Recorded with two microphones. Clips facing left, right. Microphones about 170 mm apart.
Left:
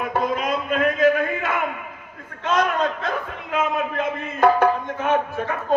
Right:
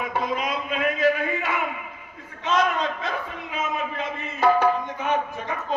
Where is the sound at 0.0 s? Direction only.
50° left (ahead or behind).